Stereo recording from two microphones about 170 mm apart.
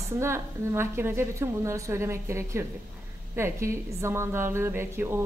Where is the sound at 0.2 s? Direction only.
15° right (ahead or behind).